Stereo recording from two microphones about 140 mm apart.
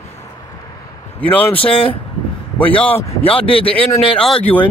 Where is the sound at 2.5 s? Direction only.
10° left (ahead or behind).